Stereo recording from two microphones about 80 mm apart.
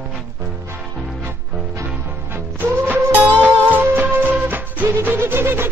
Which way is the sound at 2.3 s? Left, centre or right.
Right.